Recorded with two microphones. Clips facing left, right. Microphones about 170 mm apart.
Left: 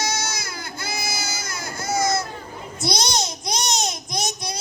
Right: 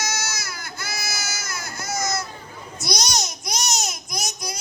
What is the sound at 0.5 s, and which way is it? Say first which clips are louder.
Baby cry: left 3 dB; 30° left (ahead or behind).